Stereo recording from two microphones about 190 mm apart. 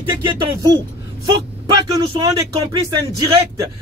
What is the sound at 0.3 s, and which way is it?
Speech, 20° right (ahead or behind).